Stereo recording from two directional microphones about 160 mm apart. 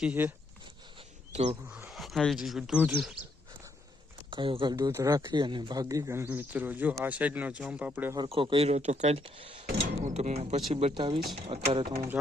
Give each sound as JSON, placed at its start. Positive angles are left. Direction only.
{"t": 0.0, "sound": "speech", "side_deg": -10}
{"t": 1.3, "sound": "speech", "side_deg": -40}
{"t": 1.7, "sound": "speech", "side_deg": -5}
{"t": 4.3, "sound": "speech", "side_deg": -35}
{"t": 8.1, "sound": "speech", "side_deg": -30}
{"t": 9.7, "sound": "speech", "side_deg": -45}